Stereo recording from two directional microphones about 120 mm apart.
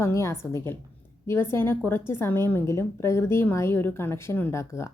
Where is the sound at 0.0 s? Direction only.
25° left (ahead or behind).